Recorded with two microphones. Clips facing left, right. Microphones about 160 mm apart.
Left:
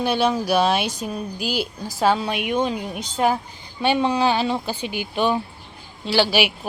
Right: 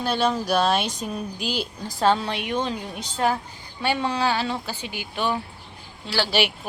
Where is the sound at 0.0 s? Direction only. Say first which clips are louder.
Left 3 dB; 10° left (ahead or behind).